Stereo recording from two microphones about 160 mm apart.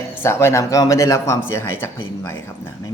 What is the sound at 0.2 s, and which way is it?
Speech, 15° left (ahead or behind).